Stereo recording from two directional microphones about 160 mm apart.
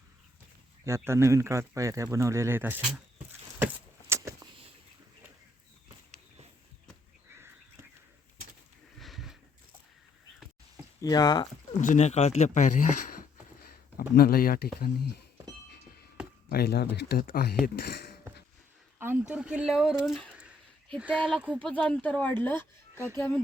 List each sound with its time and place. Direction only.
0.9 s speech: 15° right (ahead or behind)
4.1 s vehicle: 20° right (ahead or behind)
9.0 s a sound: centre (ahead or behind)
11.0 s speech: 25° left (ahead or behind)
11.8 s speech: 50° left (ahead or behind)
14.2 s speech: 70° left (ahead or behind)
16.5 s speech: 75° left (ahead or behind)
18.9 s a sound: 15° right (ahead or behind)
19.3 s speech: 5° right (ahead or behind)
21.6 s speech: 5° left (ahead or behind)